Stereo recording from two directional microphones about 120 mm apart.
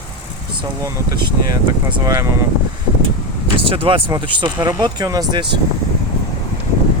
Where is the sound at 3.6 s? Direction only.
45° right (ahead or behind).